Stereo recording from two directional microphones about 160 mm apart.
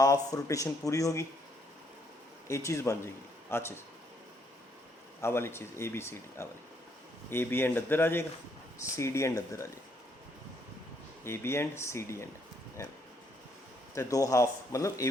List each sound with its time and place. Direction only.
0.0 s speech: 20° left (ahead or behind)
2.5 s speech: 20° left (ahead or behind)
5.2 s speech: 15° left (ahead or behind)
11.2 s speech: 15° left (ahead or behind)
13.9 s speech: 20° left (ahead or behind)